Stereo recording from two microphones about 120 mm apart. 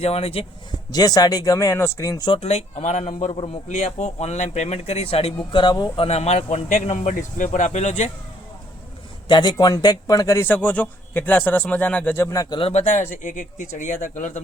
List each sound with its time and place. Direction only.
0.0 s speech: 55° left (ahead or behind)
0.9 s speech: 30° left (ahead or behind)
2.4 s speech: 65° left (ahead or behind)
5.4 s speech: 40° left (ahead or behind)
6.1 s speech: 65° left (ahead or behind)
9.2 s speech: 40° left (ahead or behind)
10.4 s speech: 10° left (ahead or behind); by 12.5 s 30° left (ahead or behind)
12.7 s speech: 75° left (ahead or behind)